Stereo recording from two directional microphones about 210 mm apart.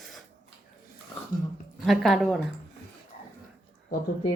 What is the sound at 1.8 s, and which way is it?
Speech, centre (ahead or behind).